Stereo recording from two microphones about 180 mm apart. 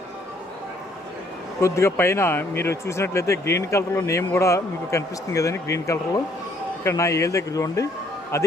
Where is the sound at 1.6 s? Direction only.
15° left (ahead or behind).